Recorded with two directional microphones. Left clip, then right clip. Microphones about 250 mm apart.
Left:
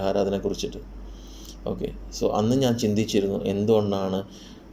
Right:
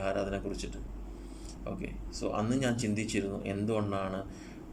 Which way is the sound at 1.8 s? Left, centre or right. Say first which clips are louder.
Left 12 dB; centre.